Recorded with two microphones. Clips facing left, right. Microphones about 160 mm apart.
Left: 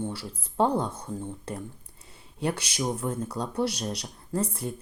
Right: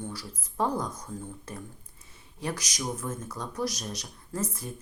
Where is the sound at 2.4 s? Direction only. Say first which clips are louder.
Left 5 dB; 30° left (ahead or behind).